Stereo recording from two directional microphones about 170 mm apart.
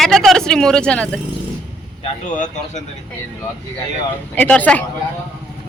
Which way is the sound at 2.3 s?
45° left (ahead or behind).